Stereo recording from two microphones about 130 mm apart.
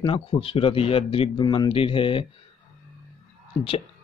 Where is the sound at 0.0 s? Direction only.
45° left (ahead or behind).